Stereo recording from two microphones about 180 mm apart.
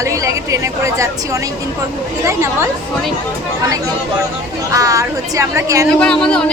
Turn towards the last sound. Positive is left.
turn(degrees=5)  # may be behind; listen again after turning